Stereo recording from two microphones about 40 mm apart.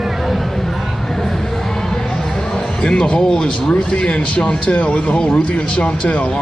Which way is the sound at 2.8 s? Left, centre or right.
Left.